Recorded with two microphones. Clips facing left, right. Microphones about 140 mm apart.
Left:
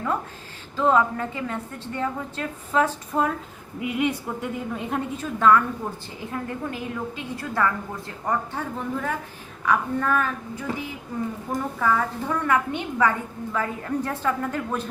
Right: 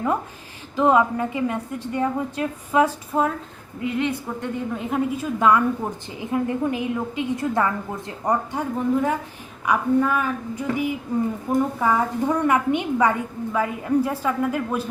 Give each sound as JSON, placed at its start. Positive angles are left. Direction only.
{"t": 0.8, "sound": "a woman's voice", "side_deg": -15}
{"t": 3.8, "sound": "a woman's voice", "side_deg": 10}